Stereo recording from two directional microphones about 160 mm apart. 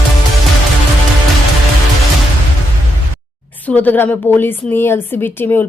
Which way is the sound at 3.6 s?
10° left (ahead or behind).